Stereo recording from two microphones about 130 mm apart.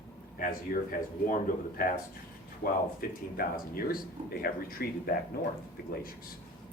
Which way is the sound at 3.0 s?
90° left.